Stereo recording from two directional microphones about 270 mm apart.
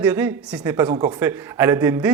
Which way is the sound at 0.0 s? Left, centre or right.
Centre.